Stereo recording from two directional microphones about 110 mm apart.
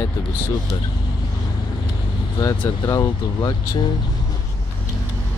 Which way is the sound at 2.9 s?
35° left (ahead or behind).